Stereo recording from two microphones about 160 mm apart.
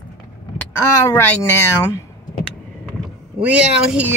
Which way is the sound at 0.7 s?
20° left (ahead or behind).